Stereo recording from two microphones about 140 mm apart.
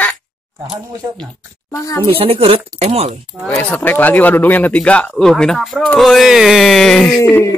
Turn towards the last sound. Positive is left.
turn(degrees=20)  # may be behind; listen again after turning